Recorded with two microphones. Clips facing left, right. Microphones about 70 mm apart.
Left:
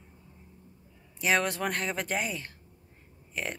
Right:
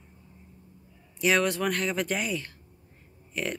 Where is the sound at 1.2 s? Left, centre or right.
Left.